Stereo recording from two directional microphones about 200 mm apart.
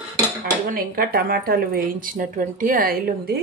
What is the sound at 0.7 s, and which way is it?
Speech, 45° right (ahead or behind).